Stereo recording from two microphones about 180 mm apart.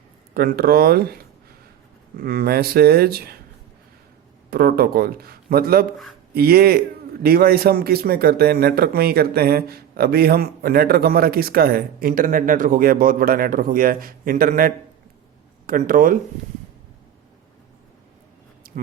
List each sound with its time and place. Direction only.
0.3 s a man's voice: 60° right (ahead or behind)
4.5 s a man's voice: 60° right (ahead or behind)
18.6 s a sound: 55° right (ahead or behind)